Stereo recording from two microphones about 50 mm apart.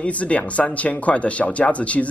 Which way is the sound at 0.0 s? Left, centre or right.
Left.